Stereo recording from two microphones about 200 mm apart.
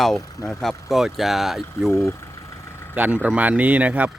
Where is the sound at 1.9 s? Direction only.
15° left (ahead or behind).